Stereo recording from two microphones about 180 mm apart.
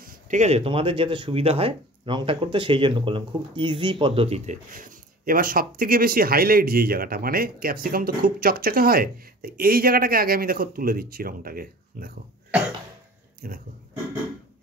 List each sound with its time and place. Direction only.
0.0 s speech: 45° right (ahead or behind)
4.6 s speech: 50° right (ahead or behind)
13.4 s a sound: 55° right (ahead or behind)